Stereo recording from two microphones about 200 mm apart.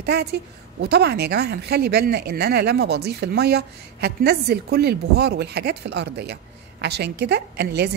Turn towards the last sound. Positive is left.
turn(degrees=-55)  # may be behind; listen again after turning